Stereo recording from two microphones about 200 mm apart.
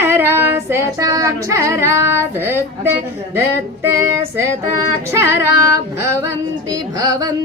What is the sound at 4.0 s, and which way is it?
Child singing, 15° right (ahead or behind).